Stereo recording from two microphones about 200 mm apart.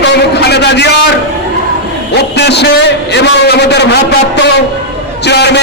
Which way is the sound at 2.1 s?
55° left (ahead or behind).